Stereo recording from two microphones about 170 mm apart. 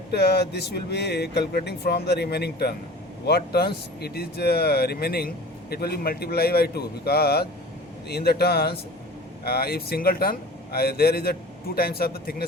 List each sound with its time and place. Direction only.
0.1 s a man's voice: 75° left (ahead or behind)